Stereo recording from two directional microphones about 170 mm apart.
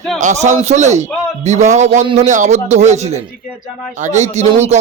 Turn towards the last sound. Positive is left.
turn(degrees=-40)  # may be behind; listen again after turning